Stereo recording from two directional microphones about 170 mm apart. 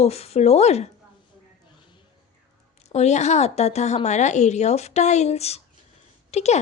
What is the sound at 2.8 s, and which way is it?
A woman's voice, 40° left (ahead or behind).